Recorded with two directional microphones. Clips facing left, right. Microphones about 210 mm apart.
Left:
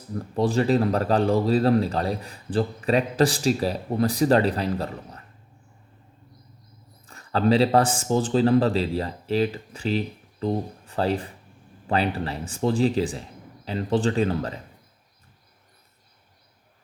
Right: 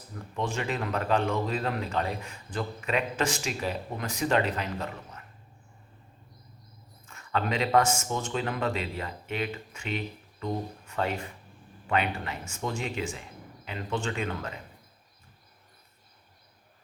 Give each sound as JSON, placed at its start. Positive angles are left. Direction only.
{"t": 0.2, "sound": "speech", "side_deg": 35}
{"t": 7.1, "sound": "speech", "side_deg": 35}